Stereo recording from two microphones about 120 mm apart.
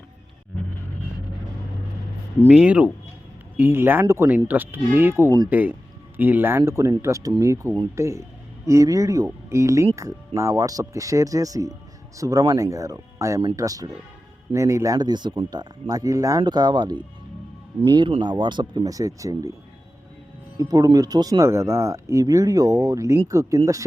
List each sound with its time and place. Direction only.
2.5 s speech: 10° right (ahead or behind); by 19.5 s 25° right (ahead or behind)
20.6 s speech: 30° right (ahead or behind)